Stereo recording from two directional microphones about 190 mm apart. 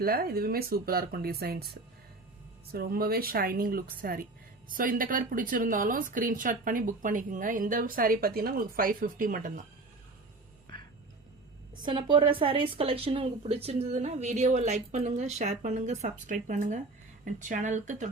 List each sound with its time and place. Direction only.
0.0 s a woman's voice: 55° right (ahead or behind)
11.8 s speech: 25° right (ahead or behind); by 18.1 s 40° right (ahead or behind)